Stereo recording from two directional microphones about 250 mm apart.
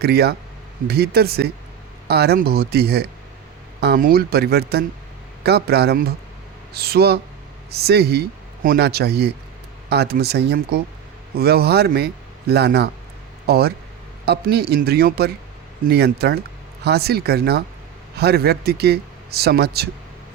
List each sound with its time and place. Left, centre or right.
0.0 s a man's voice: right